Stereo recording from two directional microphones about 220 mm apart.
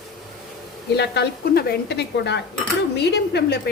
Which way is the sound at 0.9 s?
50° left (ahead or behind).